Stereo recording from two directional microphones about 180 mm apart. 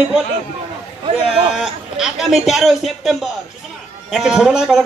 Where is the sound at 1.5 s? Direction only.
5° right (ahead or behind).